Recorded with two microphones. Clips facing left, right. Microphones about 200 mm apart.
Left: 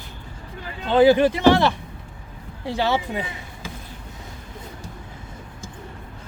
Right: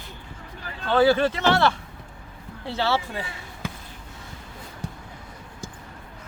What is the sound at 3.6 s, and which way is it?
Basketball bounce, 60° right (ahead or behind).